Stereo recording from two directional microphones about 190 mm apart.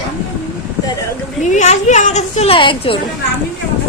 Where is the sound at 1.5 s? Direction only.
40° left (ahead or behind).